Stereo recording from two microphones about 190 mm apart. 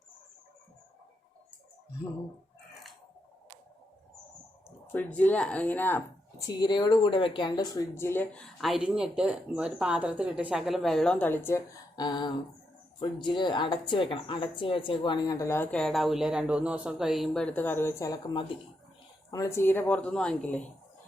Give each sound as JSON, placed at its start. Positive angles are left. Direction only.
{"t": 4.9, "sound": "speech", "side_deg": 10}
{"t": 6.4, "sound": "speech", "side_deg": 25}